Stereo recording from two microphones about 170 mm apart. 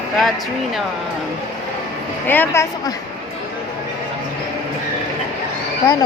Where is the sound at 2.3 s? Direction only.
10° left (ahead or behind).